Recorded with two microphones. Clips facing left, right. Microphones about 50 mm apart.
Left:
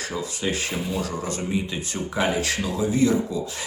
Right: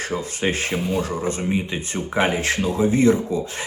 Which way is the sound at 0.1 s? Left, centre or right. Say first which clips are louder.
Right 3 dB; right.